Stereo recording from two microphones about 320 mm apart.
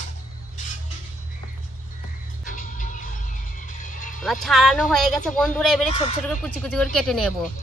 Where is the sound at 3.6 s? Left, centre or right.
Left.